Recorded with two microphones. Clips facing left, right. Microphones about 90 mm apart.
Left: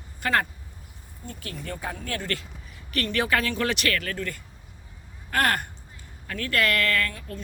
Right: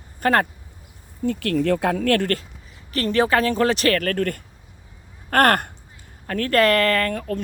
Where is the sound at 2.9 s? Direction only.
30° right (ahead or behind).